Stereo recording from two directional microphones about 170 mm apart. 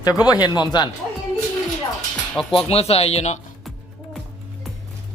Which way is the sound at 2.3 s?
5° left (ahead or behind).